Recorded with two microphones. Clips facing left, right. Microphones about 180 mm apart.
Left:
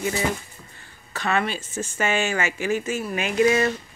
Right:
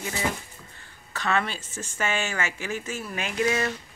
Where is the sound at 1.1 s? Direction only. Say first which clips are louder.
Left 3 dB; 10° left (ahead or behind).